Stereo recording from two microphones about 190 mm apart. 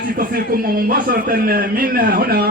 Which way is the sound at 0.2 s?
50° right (ahead or behind).